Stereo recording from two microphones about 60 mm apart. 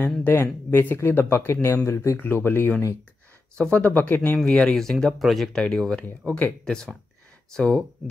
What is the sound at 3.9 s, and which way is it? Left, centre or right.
Speech, left.